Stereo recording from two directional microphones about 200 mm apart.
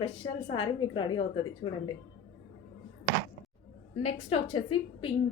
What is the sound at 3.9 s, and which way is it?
A woman's voice, 30° left (ahead or behind).